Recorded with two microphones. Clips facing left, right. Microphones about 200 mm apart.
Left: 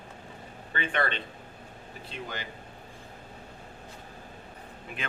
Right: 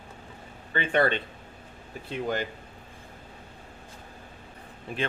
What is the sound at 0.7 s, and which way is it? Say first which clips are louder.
Speech: right 6 dB; 40° right (ahead or behind).